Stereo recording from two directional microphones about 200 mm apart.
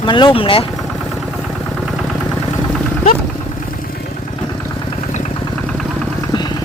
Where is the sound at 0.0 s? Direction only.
25° left (ahead or behind).